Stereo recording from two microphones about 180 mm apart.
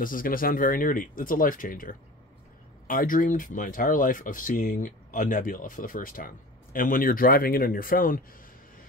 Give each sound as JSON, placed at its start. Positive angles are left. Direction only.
{"t": 0.0, "sound": "speech", "side_deg": 50}